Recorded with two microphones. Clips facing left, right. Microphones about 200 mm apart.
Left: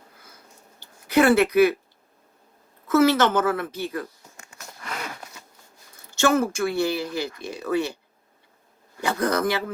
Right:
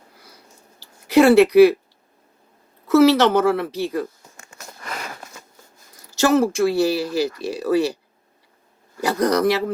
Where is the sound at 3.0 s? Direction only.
30° right (ahead or behind).